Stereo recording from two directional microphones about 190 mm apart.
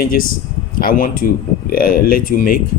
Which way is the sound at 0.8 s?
50° left (ahead or behind).